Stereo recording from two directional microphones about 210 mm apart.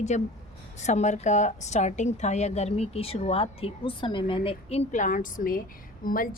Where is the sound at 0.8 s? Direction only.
35° left (ahead or behind).